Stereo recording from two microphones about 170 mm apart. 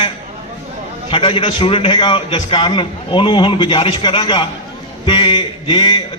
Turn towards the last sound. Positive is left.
turn(degrees=25)  # may be behind; listen again after turning